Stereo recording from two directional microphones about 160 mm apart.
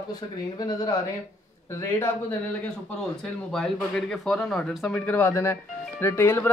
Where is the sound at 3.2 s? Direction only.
5° left (ahead or behind).